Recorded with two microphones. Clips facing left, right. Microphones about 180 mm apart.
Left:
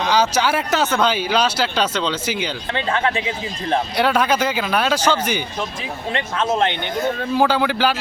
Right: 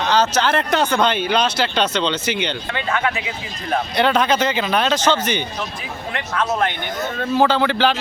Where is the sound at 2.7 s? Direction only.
30° left (ahead or behind).